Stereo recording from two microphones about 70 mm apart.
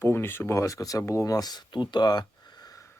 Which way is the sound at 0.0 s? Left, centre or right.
Left.